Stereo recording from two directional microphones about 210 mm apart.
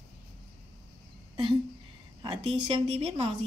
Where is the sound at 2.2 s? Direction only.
25° right (ahead or behind).